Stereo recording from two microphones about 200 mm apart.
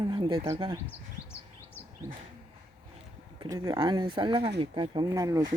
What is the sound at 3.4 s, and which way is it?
Speech, 20° right (ahead or behind).